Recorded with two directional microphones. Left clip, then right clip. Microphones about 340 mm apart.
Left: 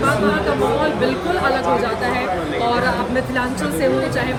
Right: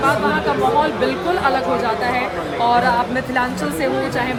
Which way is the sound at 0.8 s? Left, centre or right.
Centre.